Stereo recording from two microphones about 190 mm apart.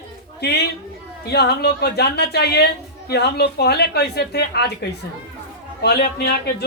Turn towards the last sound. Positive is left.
turn(degrees=55)  # may be behind; listen again after turning